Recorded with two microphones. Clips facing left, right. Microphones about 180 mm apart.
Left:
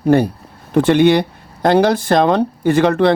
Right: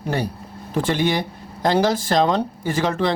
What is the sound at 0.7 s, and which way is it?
Speech, 65° left (ahead or behind).